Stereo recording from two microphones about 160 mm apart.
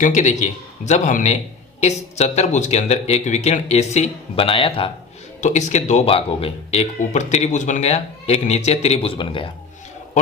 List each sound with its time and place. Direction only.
0.0 s speech: 50° left (ahead or behind); by 4.9 s 35° left (ahead or behind)
5.4 s speech: 50° left (ahead or behind); by 9.5 s 30° left (ahead or behind)